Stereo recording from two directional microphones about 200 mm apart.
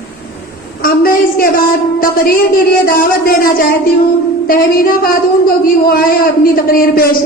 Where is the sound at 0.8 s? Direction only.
45° left (ahead or behind).